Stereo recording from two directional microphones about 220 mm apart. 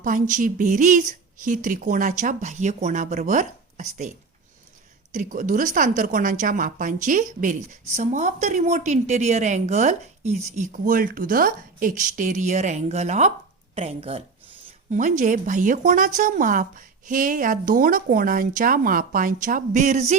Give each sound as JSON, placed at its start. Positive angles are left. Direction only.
{"t": 0.0, "sound": "a woman's voice", "side_deg": -35}
{"t": 5.1, "sound": "a woman's voice", "side_deg": -35}